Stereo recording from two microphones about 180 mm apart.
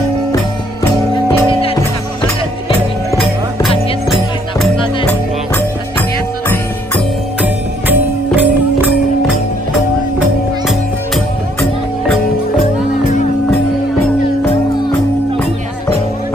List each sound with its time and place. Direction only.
1.3 s music: 30° left (ahead or behind)
7.4 s music: 10° right (ahead or behind)